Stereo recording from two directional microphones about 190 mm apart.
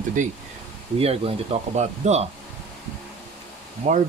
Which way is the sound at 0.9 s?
30° right (ahead or behind).